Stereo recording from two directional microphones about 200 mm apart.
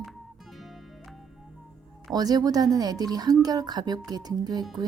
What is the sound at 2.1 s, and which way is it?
A woman's voice, 20° right (ahead or behind).